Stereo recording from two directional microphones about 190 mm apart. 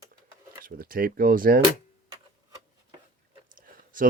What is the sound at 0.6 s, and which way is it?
Speech, 50° right (ahead or behind).